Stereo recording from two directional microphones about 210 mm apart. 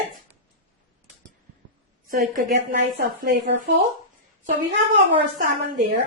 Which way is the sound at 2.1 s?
40° right (ahead or behind).